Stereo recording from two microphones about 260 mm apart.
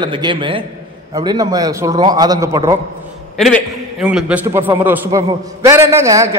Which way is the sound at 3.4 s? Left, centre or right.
Centre.